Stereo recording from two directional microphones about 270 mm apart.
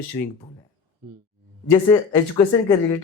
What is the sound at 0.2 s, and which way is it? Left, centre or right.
Speech, centre.